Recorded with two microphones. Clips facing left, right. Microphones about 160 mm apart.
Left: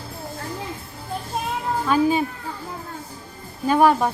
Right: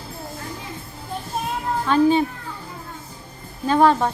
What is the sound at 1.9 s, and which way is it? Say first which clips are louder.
Speech: right 3 dB; 10° left (ahead or behind).